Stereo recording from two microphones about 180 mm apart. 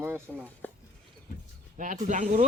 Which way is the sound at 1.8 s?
45° right (ahead or behind).